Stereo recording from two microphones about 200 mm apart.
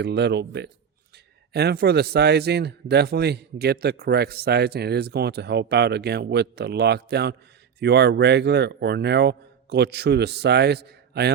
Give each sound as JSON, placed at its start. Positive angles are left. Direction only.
{"t": 0.0, "sound": "speech", "side_deg": -55}